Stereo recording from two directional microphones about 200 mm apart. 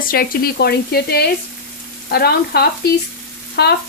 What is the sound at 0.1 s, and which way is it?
Speech, 50° left (ahead or behind).